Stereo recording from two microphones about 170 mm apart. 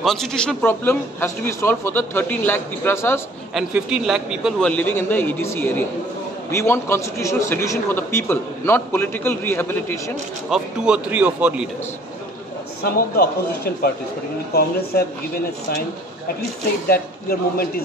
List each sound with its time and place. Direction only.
0.0 s a man's voice: centre (ahead or behind)
3.5 s a man's voice: 5° right (ahead or behind)
4.6 s a man's voice: 10° left (ahead or behind)
10.5 s a man's voice: 5° right (ahead or behind)
12.8 s speech: 65° left (ahead or behind)
16.9 s speech: 60° left (ahead or behind)